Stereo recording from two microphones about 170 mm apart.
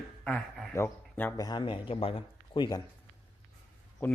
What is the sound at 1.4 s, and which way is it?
A man's voice, 25° left (ahead or behind).